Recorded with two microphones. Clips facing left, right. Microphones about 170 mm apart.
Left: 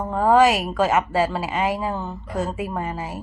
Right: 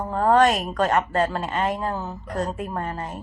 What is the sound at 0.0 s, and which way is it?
A woman's voice, centre (ahead or behind).